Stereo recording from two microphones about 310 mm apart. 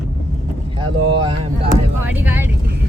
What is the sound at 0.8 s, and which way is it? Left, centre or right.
Speech, right.